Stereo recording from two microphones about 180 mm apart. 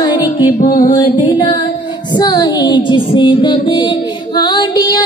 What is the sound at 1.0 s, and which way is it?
Music, 25° left (ahead or behind).